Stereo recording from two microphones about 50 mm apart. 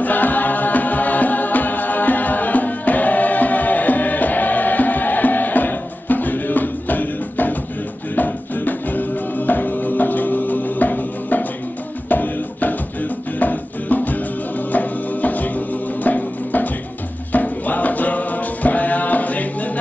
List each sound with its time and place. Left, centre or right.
0.0 s music: left